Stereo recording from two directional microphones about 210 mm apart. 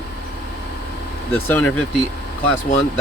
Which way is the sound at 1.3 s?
10° left (ahead or behind).